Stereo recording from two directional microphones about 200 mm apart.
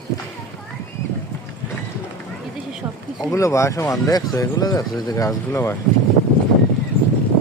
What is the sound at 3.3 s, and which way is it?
Speech, 15° left (ahead or behind).